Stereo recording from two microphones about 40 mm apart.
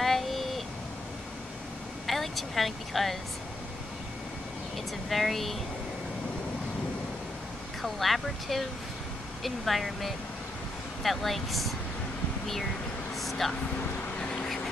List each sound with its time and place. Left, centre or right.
0.0 s a sound: centre
2.0 s speech: centre
5.1 s speech: centre
7.8 s speech: centre
13.1 s a sound: centre
14.2 s vehicle: left